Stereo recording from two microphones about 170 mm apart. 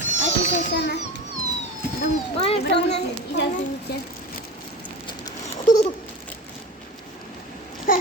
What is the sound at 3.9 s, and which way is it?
Speech, 70° left (ahead or behind).